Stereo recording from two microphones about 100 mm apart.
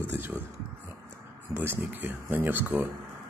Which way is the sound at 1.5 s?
20° right (ahead or behind).